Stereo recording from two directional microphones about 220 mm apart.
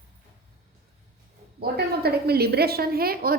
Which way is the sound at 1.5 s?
45° right (ahead or behind).